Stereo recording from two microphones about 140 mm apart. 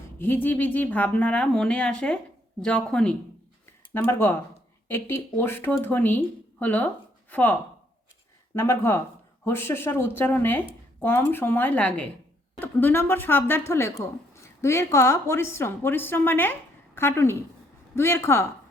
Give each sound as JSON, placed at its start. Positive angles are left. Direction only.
{"t": 0.2, "sound": "a woman's voice", "side_deg": 15}
{"t": 8.5, "sound": "a woman's voice", "side_deg": 15}